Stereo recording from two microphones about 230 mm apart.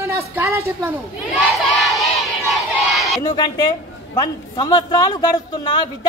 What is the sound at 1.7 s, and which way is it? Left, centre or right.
Crowd, centre.